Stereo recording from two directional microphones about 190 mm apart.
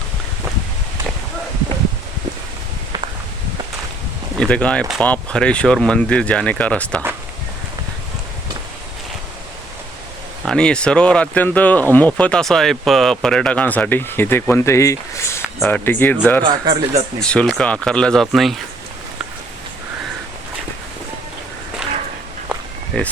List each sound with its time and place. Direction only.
4.4 s speech: 5° left (ahead or behind)
10.4 s speech: 5° left (ahead or behind)
16.4 s speech: 20° right (ahead or behind)
17.2 s speech: 5° left (ahead or behind)
22.9 s speech: 5° left (ahead or behind)